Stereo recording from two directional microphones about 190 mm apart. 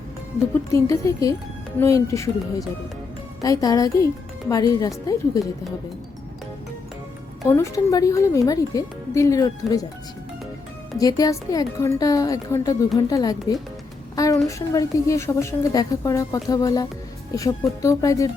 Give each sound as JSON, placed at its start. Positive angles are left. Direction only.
{"t": 0.7, "sound": "a woman's voice", "side_deg": 15}
{"t": 7.4, "sound": "a woman's voice", "side_deg": 15}
{"t": 10.9, "sound": "a woman's voice", "side_deg": 20}